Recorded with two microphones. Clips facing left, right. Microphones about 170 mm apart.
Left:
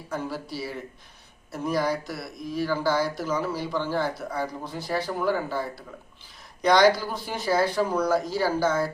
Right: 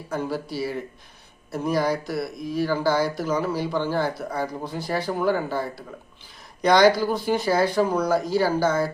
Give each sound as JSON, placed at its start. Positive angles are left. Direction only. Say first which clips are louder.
{"t": 0.1, "sound": "speech", "louder": "right 4 dB", "side_deg": 0}
{"t": 7.8, "sound": "speech", "louder": "right 3 dB", "side_deg": -15}
{"t": 8.0, "sound": "speech", "louder": "right 3 dB", "side_deg": 0}